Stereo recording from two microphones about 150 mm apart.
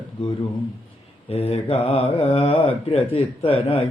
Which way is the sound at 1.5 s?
40° left (ahead or behind).